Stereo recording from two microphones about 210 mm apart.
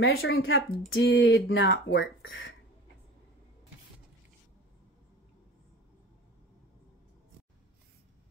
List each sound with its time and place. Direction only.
0.0 s speech: 70° left (ahead or behind)